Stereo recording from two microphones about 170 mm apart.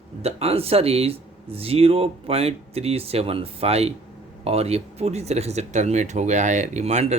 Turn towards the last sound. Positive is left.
turn(degrees=-40)  # may be behind; listen again after turning